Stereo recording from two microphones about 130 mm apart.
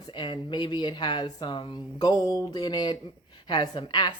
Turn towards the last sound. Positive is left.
turn(degrees=35)  # may be behind; listen again after turning